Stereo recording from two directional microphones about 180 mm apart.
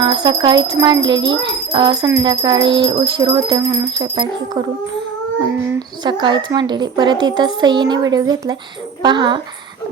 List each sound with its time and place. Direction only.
0.0 s a woman's voice: 25° right (ahead or behind)
6.0 s a woman's voice: 25° right (ahead or behind)